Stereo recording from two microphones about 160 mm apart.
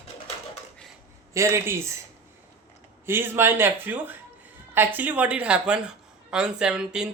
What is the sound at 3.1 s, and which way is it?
Speech, 15° right (ahead or behind).